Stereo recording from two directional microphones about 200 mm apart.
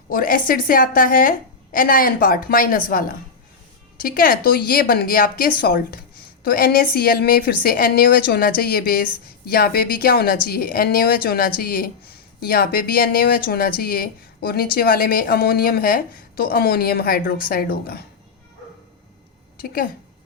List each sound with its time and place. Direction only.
0.1 s a woman's voice: 45° left (ahead or behind)
19.5 s a woman's voice: 45° left (ahead or behind)